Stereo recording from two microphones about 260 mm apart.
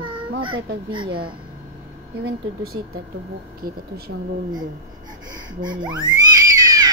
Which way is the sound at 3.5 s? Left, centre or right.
Right.